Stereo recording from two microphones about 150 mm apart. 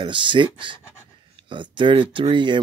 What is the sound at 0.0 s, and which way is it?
Speech, 35° right (ahead or behind).